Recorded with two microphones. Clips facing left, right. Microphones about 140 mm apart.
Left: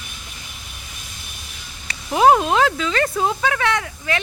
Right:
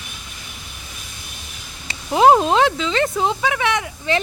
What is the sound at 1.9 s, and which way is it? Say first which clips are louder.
Speech: right 1 dB; 25° right (ahead or behind).